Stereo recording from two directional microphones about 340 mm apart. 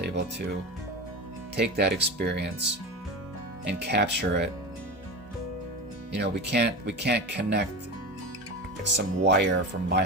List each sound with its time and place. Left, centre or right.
0.0 s music: right
1.5 s speech: right
3.8 s speech: right
6.1 s speech: right
8.8 s speech: right